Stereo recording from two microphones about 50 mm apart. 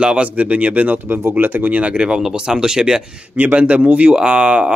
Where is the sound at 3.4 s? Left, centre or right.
Right.